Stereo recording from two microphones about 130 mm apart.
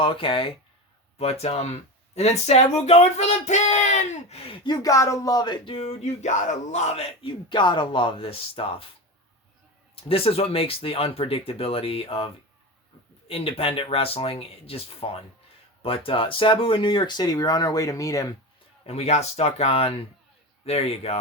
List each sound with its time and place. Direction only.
0.0 s speech: 45° left (ahead or behind)
1.2 s speech: 55° left (ahead or behind); by 5.7 s 35° left (ahead or behind)
5.7 s speech: 55° left (ahead or behind)
9.9 s speech: 45° left (ahead or behind); by 18.3 s 25° left (ahead or behind)
18.9 s speech: 55° left (ahead or behind)